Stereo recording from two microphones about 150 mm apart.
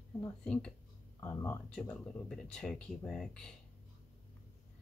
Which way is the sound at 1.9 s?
5° left (ahead or behind).